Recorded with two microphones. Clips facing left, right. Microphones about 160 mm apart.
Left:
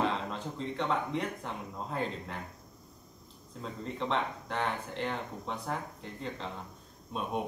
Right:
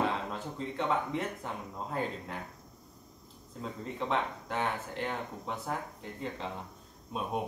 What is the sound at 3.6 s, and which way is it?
Speech, 5° right (ahead or behind).